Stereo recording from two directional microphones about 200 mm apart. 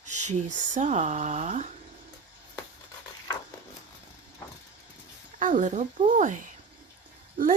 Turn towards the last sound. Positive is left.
turn(degrees=-45)  # may be behind; listen again after turning